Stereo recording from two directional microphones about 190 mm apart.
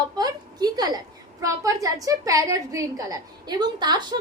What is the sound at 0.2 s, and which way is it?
A woman's voice, 20° right (ahead or behind).